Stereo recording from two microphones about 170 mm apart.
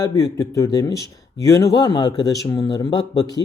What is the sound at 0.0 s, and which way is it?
Speech, 20° left (ahead or behind).